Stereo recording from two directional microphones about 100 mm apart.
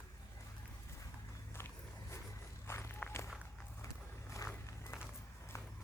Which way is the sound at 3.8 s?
30° left (ahead or behind).